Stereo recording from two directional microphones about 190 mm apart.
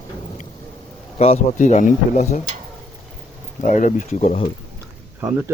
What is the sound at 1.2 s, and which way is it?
Speech, 35° left (ahead or behind).